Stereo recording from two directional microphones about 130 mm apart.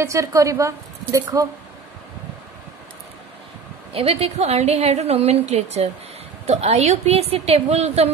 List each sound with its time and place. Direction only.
0.0 s speech: 25° right (ahead or behind)
3.9 s a woman's voice: 50° right (ahead or behind)